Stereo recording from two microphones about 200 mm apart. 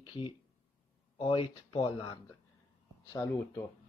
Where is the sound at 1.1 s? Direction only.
25° left (ahead or behind).